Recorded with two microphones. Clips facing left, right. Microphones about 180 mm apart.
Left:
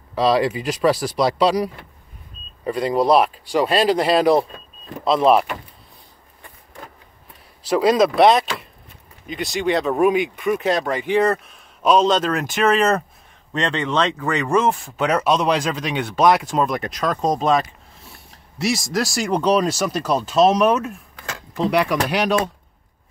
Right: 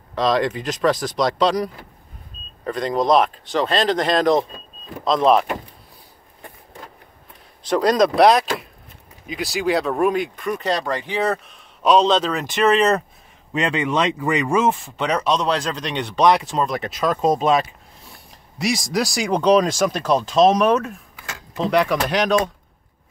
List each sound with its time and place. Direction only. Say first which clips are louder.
0.1 s speech: left 2 dB; 5° left (ahead or behind)
7.6 s speech: left 1 dB; 5° left (ahead or behind)